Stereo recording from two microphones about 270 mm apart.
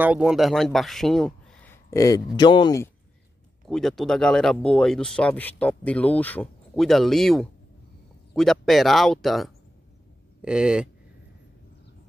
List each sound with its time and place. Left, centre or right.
0.0 s speech: centre
3.6 s speech: centre